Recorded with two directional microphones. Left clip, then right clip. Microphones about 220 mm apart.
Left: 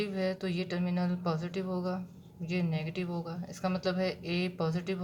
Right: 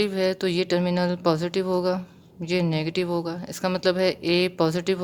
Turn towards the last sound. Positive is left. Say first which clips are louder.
# right 11 dB
turn(degrees=-50)  # may be behind; listen again after turning